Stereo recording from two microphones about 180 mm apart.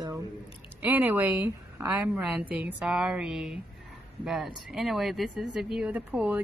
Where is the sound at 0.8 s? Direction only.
10° right (ahead or behind).